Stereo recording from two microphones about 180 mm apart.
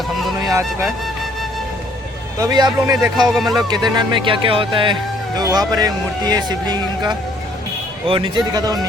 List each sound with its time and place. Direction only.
0.2 s music: centre (ahead or behind)
2.4 s speech: 25° right (ahead or behind)
3.3 s speech: centre (ahead or behind)
3.7 s speech: 20° right (ahead or behind)